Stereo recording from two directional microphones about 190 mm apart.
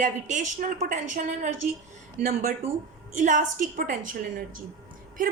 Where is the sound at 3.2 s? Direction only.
45° right (ahead or behind).